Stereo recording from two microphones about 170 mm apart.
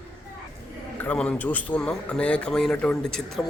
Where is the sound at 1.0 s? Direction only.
10° left (ahead or behind).